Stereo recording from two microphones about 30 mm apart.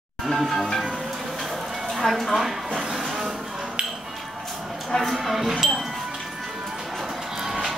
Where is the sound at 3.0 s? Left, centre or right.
Centre.